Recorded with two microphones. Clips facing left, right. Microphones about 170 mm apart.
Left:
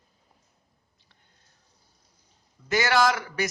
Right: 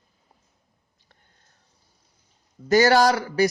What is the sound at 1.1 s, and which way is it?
Sniff, 45° right (ahead or behind).